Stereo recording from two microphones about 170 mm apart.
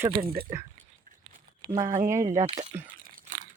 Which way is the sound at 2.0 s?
15° right (ahead or behind).